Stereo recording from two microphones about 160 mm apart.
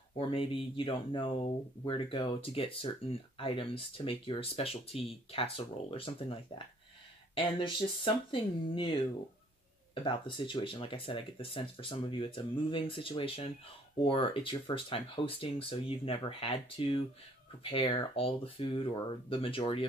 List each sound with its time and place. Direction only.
0.1 s speech: 35° left (ahead or behind)
10.0 s speech: 30° left (ahead or behind)